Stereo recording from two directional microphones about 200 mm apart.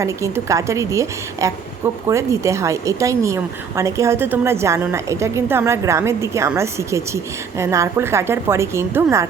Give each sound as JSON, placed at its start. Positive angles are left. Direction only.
{"t": 0.0, "sound": "a woman's voice", "side_deg": -15}